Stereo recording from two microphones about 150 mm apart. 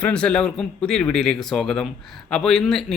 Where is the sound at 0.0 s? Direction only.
5° left (ahead or behind).